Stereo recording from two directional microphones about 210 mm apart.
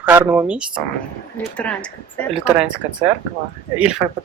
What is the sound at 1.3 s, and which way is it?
Speech, 5° left (ahead or behind).